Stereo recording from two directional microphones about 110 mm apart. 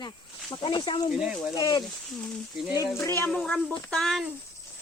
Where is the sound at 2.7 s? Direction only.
30° left (ahead or behind).